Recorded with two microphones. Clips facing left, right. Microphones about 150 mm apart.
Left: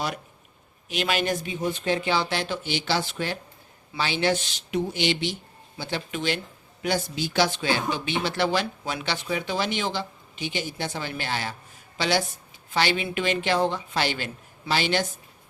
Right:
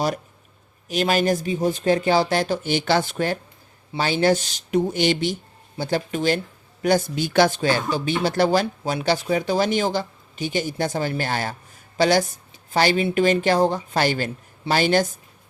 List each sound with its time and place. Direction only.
0.9 s speech: 40° right (ahead or behind)